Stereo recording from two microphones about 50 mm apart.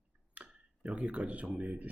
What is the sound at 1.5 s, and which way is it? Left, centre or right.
Speech, right.